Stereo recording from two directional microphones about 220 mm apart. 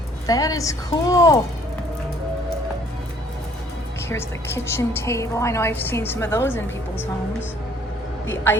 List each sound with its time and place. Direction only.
0.3 s a woman's voice: 15° left (ahead or behind)
4.1 s a woman's voice: 10° left (ahead or behind)